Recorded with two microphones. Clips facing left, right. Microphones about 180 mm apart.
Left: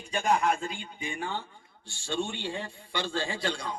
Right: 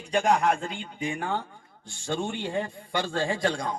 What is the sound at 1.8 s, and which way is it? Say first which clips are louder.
Speech: right 4 dB; 75° left (ahead or behind).